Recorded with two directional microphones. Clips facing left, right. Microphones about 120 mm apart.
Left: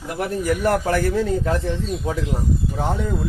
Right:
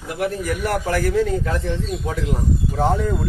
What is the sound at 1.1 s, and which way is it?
Speech, 30° left (ahead or behind).